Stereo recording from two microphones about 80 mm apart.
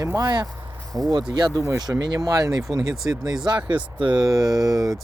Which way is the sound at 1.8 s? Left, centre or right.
Right.